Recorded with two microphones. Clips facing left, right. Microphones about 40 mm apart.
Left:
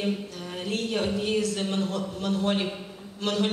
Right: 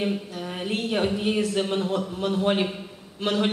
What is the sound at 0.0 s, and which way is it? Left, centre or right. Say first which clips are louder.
Speech: right 2 dB; centre.